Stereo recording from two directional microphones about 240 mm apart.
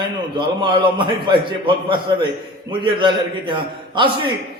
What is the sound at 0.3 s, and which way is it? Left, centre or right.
A man's voice, centre.